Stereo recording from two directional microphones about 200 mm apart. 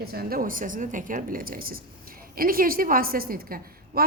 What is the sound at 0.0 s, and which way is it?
Speech, 50° right (ahead or behind).